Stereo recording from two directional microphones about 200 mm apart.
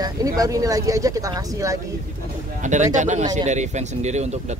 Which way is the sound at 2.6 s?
35° right (ahead or behind).